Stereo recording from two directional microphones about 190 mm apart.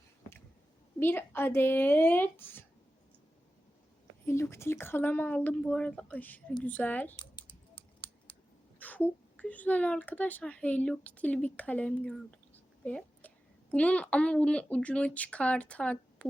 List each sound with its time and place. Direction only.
0.9 s speech: 10° left (ahead or behind)
4.3 s speech: 15° left (ahead or behind)
7.2 s typing: 25° left (ahead or behind)
8.8 s a woman's voice: 10° left (ahead or behind)